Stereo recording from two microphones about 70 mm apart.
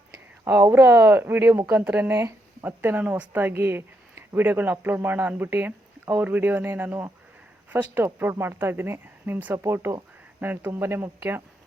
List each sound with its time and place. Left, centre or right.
0.1 s speech: right
2.6 s speech: right